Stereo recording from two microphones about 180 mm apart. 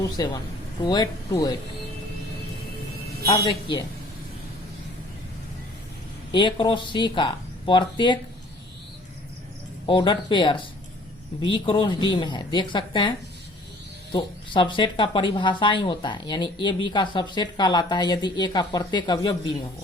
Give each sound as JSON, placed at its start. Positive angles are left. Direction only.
{"t": 0.2, "sound": "speech", "side_deg": 20}
{"t": 3.2, "sound": "speech", "side_deg": 25}
{"t": 6.3, "sound": "speech", "side_deg": 25}
{"t": 9.8, "sound": "speech", "side_deg": 25}